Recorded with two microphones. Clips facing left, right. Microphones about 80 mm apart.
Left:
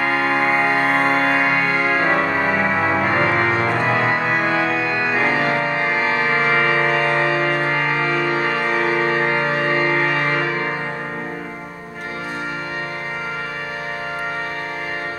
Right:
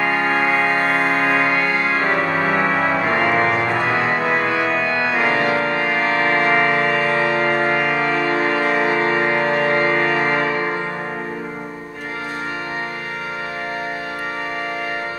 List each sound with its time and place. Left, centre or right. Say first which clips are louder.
0.3 s music: even; centre
10.1 s music: right 2 dB; centre